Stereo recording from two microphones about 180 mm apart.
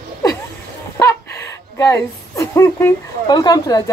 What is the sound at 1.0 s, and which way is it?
Speech, 15° left (ahead or behind).